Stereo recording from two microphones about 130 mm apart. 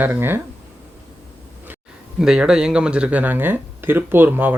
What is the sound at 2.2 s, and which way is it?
Speech, 5° right (ahead or behind).